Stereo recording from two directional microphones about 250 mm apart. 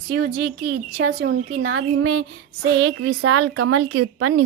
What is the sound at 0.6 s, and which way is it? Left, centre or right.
A woman's voice, right.